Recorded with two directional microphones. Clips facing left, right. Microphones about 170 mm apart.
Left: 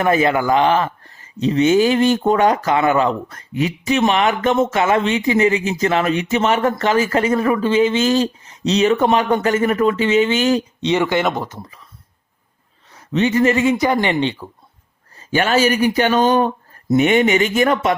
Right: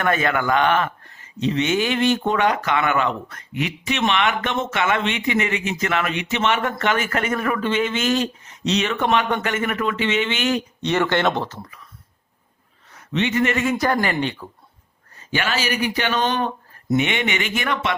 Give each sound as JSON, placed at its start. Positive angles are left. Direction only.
{"t": 0.0, "sound": "speech", "side_deg": 30}
{"t": 10.8, "sound": "speech", "side_deg": 15}
{"t": 13.1, "sound": "speech", "side_deg": 35}
{"t": 15.2, "sound": "speech", "side_deg": 40}